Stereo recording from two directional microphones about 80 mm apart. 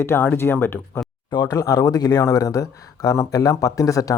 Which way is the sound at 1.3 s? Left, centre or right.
Left.